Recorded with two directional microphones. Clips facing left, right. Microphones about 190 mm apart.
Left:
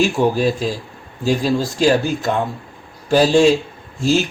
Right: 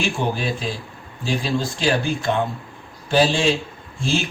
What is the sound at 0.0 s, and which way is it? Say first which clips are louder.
A man's voice: left 8 dB; 40° left (ahead or behind).